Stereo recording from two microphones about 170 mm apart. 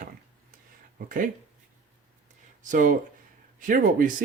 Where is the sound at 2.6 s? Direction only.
50° right (ahead or behind).